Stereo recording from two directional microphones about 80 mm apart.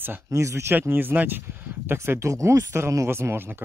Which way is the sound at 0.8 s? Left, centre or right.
Right.